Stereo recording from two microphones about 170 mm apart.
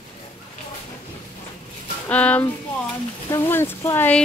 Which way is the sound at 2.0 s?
10° left (ahead or behind).